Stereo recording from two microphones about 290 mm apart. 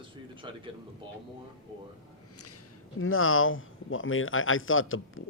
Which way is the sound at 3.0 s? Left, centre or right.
Left.